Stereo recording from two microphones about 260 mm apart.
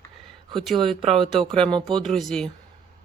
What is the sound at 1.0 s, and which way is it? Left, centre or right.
Speech, right.